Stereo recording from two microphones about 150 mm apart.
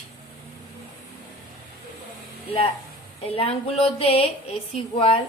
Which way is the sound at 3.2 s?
40° left (ahead or behind).